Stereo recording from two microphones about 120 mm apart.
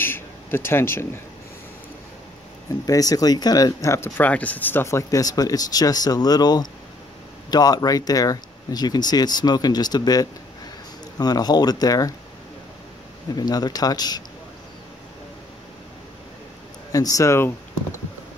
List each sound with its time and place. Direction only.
0.0 s a sound: 20° left (ahead or behind)
2.7 s speech: 30° left (ahead or behind)
4.2 s speech: 10° left (ahead or behind); by 12.2 s 30° left (ahead or behind)
13.4 s speech: 35° left (ahead or behind)
16.9 s speech: 30° left (ahead or behind)